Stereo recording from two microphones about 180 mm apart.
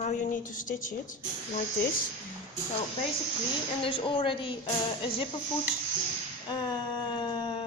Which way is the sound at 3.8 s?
30° left (ahead or behind).